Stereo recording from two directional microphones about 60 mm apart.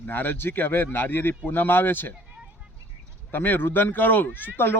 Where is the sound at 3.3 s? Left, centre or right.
Left.